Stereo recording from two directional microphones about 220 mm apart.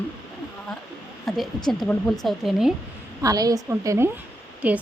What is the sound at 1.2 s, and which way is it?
A woman's voice, centre (ahead or behind).